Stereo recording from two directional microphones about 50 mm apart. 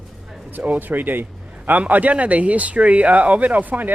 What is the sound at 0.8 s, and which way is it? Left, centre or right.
A man's voice, right.